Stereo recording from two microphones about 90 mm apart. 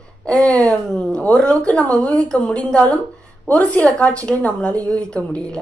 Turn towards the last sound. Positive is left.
turn(degrees=10)  # may be behind; listen again after turning